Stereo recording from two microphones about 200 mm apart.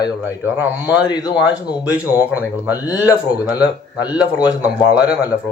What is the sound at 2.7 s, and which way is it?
Speech, 15° left (ahead or behind).